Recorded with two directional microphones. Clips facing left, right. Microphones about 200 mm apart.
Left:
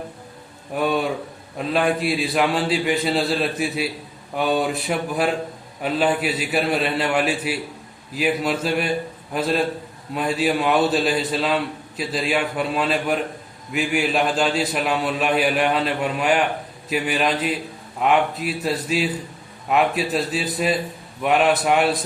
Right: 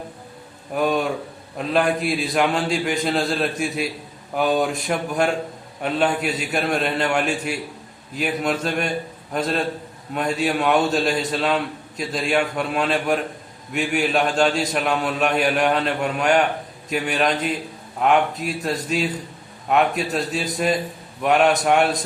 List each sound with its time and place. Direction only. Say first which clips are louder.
0.7 s a man's voice: right 1 dB; centre (ahead or behind)